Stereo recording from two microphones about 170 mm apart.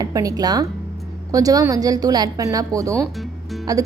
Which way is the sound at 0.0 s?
20° right (ahead or behind).